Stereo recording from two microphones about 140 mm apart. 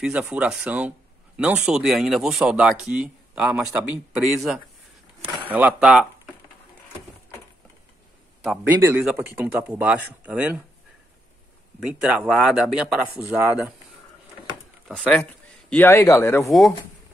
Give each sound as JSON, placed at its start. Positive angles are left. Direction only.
{"t": 0.0, "sound": "speech", "side_deg": -5}
{"t": 8.6, "sound": "speech", "side_deg": -10}
{"t": 11.9, "sound": "speech", "side_deg": -5}
{"t": 14.9, "sound": "speech", "side_deg": 5}
{"t": 15.7, "sound": "speech", "side_deg": 15}